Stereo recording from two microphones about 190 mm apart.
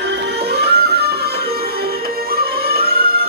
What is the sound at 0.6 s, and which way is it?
Music, 60° right (ahead or behind).